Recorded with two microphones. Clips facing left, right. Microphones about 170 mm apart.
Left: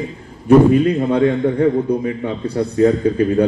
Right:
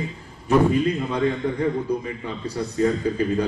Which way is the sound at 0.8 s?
60° left (ahead or behind).